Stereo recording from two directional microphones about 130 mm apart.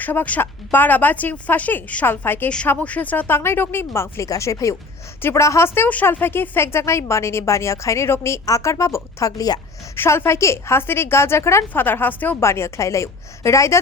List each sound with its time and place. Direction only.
0.0 s a woman's voice: 15° left (ahead or behind)